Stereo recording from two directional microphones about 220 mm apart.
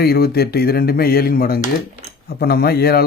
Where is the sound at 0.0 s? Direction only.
45° left (ahead or behind).